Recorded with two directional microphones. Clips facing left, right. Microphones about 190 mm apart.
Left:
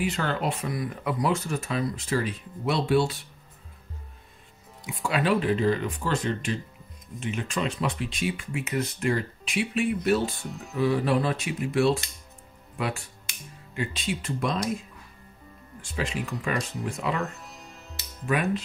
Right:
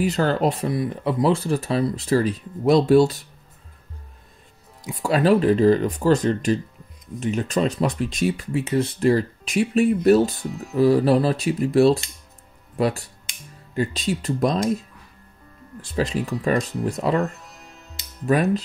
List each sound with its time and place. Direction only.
0.0 s speech: 40° right (ahead or behind)
4.8 s speech: 40° right (ahead or behind)
10.3 s speech: centre (ahead or behind)
10.8 s speech: 35° right (ahead or behind)
15.8 s speech: 35° right (ahead or behind)
17.2 s music: centre (ahead or behind)
18.2 s speech: 35° right (ahead or behind)